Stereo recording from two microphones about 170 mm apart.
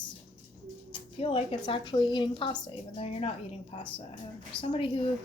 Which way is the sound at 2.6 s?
35° left (ahead or behind).